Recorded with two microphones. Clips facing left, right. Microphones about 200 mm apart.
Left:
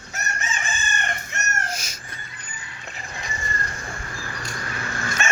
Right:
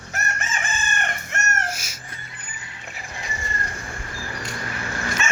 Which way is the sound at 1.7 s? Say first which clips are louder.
Left 3 dB; 5° right (ahead or behind).